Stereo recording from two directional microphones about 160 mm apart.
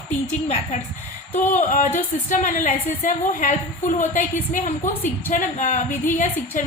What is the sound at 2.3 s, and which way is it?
A woman's voice, 55° left (ahead or behind).